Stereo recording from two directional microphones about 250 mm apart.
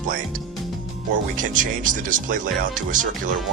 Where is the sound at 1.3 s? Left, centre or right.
Right.